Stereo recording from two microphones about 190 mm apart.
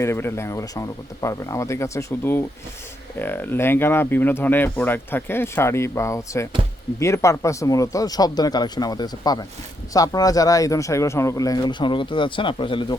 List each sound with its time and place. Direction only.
0.0 s speech: 15° left (ahead or behind)